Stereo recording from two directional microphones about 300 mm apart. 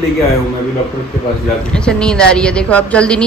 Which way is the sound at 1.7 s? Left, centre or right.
Centre.